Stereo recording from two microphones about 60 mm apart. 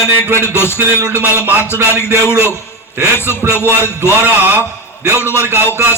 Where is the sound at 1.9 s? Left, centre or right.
Left.